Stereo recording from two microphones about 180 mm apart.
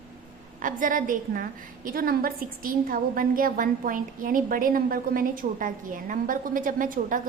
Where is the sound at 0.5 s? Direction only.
45° right (ahead or behind).